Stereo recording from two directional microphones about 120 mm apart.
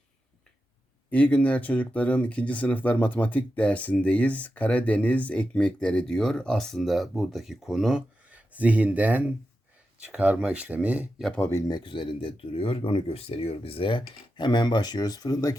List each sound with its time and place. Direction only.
1.1 s speech: 10° left (ahead or behind); by 11.1 s 10° right (ahead or behind)
11.3 s speech: 15° left (ahead or behind)
11.5 s speech: 40° left (ahead or behind)